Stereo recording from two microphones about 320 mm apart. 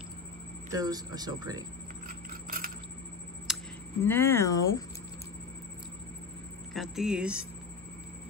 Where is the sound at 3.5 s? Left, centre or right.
Centre.